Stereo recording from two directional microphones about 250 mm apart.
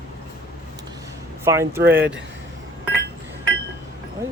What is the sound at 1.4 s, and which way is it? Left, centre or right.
Speech, centre.